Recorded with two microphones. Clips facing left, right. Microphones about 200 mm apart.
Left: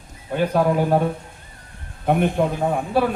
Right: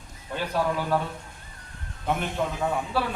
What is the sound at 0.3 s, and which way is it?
A man's voice, 50° left (ahead or behind).